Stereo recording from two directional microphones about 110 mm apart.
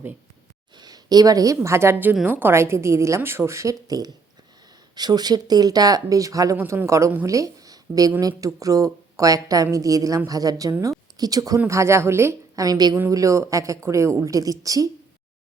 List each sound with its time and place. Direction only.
0.8 s a woman's voice: 35° right (ahead or behind)